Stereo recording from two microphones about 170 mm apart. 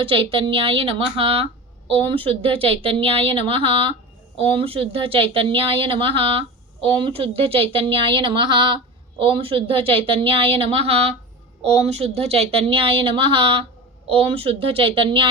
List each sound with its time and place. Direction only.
0.0 s speech: 30° right (ahead or behind)